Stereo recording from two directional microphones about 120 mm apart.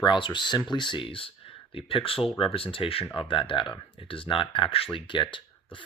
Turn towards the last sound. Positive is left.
turn(degrees=45)  # may be behind; listen again after turning